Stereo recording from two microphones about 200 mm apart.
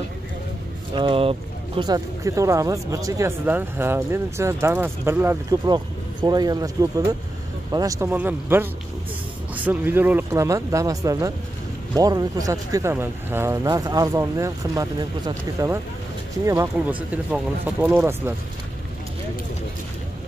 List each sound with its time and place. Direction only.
0.9 s vehicle: 25° right (ahead or behind)
1.8 s speech: 15° right (ahead or behind)